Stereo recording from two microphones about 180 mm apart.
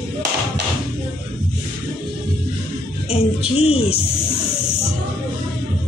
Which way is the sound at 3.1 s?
35° left (ahead or behind).